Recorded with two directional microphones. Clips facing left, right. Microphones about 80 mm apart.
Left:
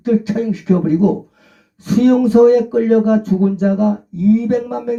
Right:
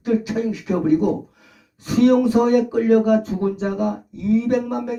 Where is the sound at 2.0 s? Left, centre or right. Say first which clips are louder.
Left 6 dB; left.